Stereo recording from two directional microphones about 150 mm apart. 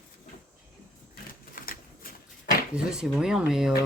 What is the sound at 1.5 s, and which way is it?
Typewriter, 70° left (ahead or behind).